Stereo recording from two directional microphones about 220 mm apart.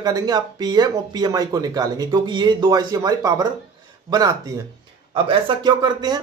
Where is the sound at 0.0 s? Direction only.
15° right (ahead or behind).